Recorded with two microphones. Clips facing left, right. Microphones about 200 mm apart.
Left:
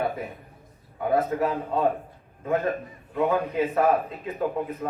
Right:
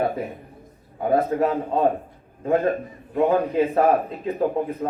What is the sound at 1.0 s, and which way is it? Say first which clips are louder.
Speech: right 3 dB; 30° right (ahead or behind).